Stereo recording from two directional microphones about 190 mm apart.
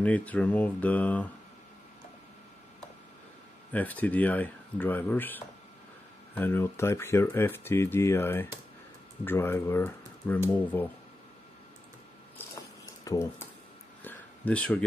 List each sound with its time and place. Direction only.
0.0 s speech: 10° left (ahead or behind)
3.7 s speech: 10° left (ahead or behind)
12.4 s a sound: 15° left (ahead or behind)